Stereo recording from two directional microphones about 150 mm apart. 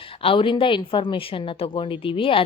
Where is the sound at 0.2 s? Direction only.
35° left (ahead or behind).